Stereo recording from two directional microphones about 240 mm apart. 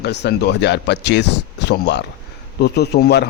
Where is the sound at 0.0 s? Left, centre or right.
Left.